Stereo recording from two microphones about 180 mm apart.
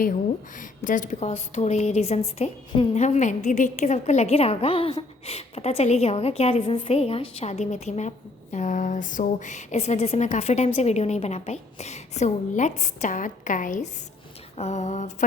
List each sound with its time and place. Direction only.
0.6 s a woman's voice: 45° left (ahead or behind)